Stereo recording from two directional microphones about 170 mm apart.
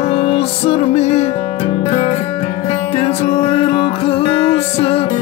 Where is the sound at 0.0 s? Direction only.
40° left (ahead or behind).